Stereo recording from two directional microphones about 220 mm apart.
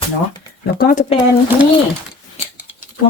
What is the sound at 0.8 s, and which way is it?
Speech, 40° left (ahead or behind).